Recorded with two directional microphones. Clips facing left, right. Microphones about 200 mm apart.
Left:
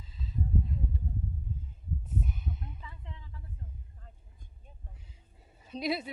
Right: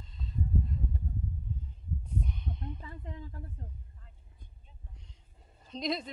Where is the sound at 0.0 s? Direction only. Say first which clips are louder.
Left 1 dB; 5° left (ahead or behind).